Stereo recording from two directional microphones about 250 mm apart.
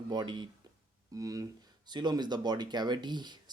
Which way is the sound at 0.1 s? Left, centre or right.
Centre.